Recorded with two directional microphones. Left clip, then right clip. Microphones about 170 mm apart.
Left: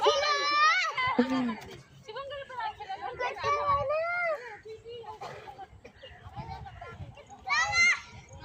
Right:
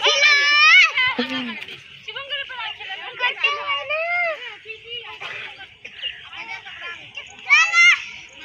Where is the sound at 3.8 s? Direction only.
15° left (ahead or behind).